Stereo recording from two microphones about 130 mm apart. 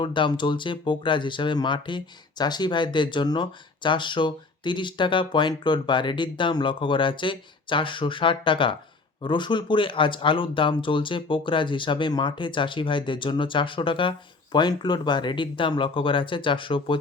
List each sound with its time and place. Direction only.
0.0 s speech: 40° left (ahead or behind)